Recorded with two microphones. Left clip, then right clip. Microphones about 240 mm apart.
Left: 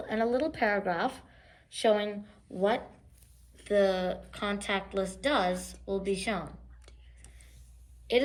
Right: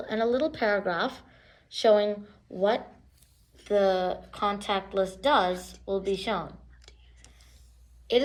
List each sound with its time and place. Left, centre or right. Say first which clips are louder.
0.1 s speech: right 3 dB; centre
2.6 s a woman's voice: right 3 dB; right